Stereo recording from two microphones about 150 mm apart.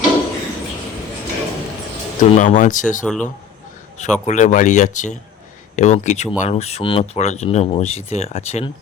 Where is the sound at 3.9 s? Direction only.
50° left (ahead or behind).